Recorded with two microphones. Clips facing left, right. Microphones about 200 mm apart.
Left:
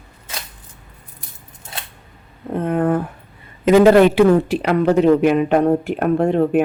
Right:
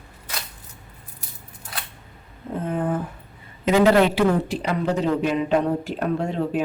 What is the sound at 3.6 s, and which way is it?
A man's voice, 50° left (ahead or behind).